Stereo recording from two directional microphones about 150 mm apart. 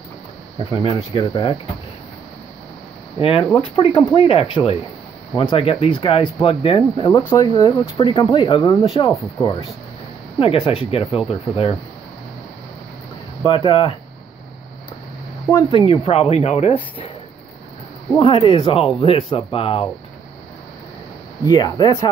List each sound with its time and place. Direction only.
0.8 s speech: 30° left (ahead or behind)
3.2 s speech: 35° left (ahead or behind)
7.1 s speech: 25° left (ahead or behind)
10.4 s speech: 35° left (ahead or behind)
13.4 s speech: 35° left (ahead or behind)
15.5 s speech: 35° left (ahead or behind)
18.2 s speech: 40° left (ahead or behind)
21.5 s speech: 30° left (ahead or behind)